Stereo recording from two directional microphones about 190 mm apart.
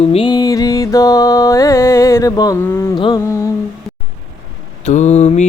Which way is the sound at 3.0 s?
20° left (ahead or behind).